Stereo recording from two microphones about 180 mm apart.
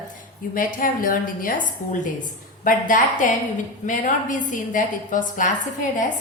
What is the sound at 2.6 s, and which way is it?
A woman's voice, 50° left (ahead or behind).